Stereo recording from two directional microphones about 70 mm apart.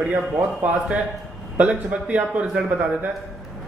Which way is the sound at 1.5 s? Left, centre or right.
Centre.